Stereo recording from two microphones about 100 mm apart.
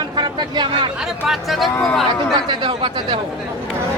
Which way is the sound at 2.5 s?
55° right (ahead or behind).